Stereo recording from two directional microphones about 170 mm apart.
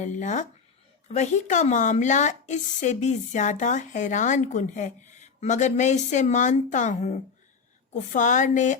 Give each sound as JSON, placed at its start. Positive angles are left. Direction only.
{"t": 0.0, "sound": "speech", "side_deg": 45}